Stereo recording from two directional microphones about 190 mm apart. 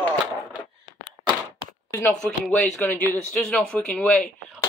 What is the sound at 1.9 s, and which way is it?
A man's voice, 10° left (ahead or behind).